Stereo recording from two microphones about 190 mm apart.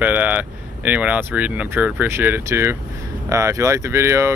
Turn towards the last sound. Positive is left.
turn(degrees=-15)  # may be behind; listen again after turning